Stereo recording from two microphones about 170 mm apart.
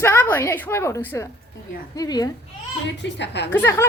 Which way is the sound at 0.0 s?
10° left (ahead or behind).